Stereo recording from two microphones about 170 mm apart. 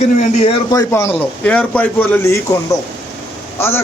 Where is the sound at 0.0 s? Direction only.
40° left (ahead or behind).